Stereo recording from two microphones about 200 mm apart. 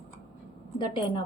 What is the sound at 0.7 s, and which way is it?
Speech, 20° left (ahead or behind).